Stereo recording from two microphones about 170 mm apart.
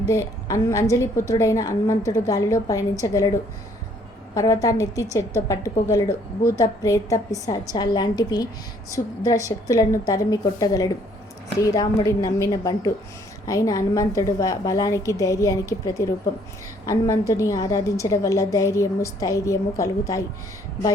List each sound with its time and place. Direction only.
0.1 s a woman's voice: 20° left (ahead or behind)
4.4 s a woman's voice: 20° left (ahead or behind)